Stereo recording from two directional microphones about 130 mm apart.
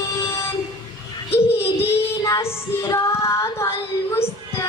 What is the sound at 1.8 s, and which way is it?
Child singing, 50° left (ahead or behind).